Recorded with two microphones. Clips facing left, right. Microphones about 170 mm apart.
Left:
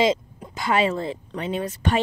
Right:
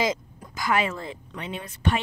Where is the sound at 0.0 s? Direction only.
25° left (ahead or behind).